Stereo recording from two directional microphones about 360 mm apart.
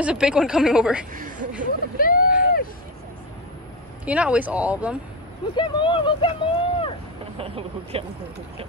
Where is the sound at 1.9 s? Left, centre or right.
Left.